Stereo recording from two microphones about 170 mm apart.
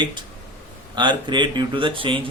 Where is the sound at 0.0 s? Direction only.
25° right (ahead or behind).